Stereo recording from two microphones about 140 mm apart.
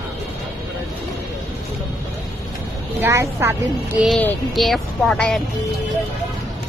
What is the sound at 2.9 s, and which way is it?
Speech, 20° right (ahead or behind).